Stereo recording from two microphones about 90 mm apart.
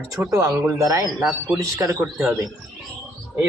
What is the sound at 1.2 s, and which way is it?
Speech, 5° right (ahead or behind).